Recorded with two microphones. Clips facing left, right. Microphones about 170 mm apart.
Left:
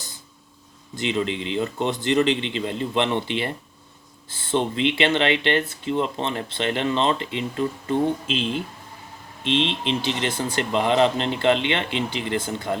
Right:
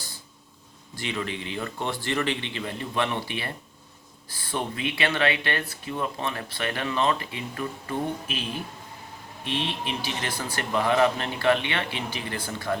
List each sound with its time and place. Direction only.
0.9 s speech: 20° left (ahead or behind)